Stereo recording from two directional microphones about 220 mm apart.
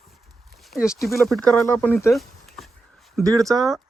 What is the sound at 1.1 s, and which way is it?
Speech, centre (ahead or behind).